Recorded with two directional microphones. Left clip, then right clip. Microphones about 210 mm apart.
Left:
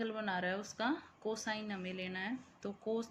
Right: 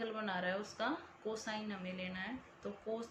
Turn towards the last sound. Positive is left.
turn(degrees=55)  # may be behind; listen again after turning